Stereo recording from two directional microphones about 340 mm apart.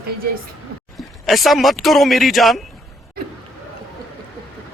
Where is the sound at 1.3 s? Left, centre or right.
Centre.